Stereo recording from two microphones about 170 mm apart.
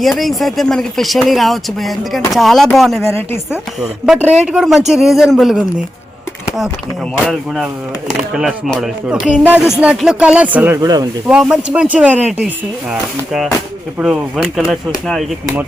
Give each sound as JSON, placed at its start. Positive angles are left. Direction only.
{"t": 0.0, "sound": "speech", "side_deg": 0}
{"t": 3.0, "sound": "speech", "side_deg": 15}
{"t": 4.0, "sound": "speech", "side_deg": -5}
{"t": 7.3, "sound": "speech", "side_deg": 0}
{"t": 10.8, "sound": "speech", "side_deg": -25}
{"t": 11.3, "sound": "speech", "side_deg": -5}